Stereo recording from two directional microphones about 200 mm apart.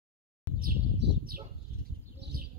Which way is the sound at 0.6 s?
60° right (ahead or behind).